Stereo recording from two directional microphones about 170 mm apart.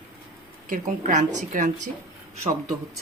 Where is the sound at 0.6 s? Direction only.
50° right (ahead or behind).